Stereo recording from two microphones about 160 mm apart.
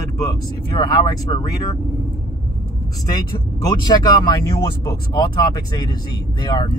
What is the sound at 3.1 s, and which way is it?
Speech, 25° left (ahead or behind).